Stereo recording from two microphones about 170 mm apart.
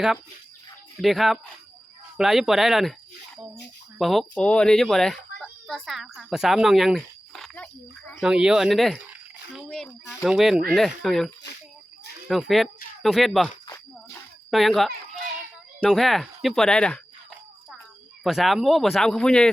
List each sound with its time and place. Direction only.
1.0 s speech: centre (ahead or behind)
3.9 s speech: centre (ahead or behind)
12.3 s speech: centre (ahead or behind)
14.5 s speech: centre (ahead or behind)
18.2 s speech: centre (ahead or behind)